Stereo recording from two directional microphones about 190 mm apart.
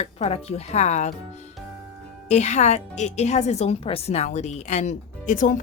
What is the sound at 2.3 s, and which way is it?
A woman's voice, 35° left (ahead or behind).